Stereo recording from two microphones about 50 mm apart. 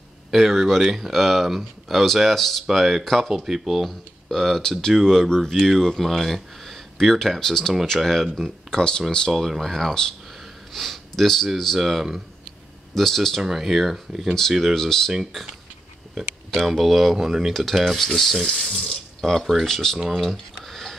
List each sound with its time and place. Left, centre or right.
0.3 s speech: centre
8.4 s speech: centre
11.8 s speech: centre
12.9 s speech: centre
13.4 s speech: centre
14.6 s speech: centre
16.2 s speech: centre
17.2 s speech: centre
17.5 s speech: centre
18.5 s speech: centre
20.2 s a sound: centre